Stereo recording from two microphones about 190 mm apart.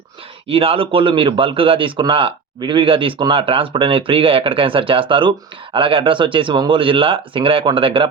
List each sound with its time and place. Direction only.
0.4 s a man's voice: 30° right (ahead or behind)